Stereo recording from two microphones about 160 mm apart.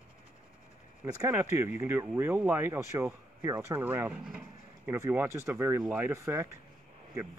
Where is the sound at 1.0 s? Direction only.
15° right (ahead or behind).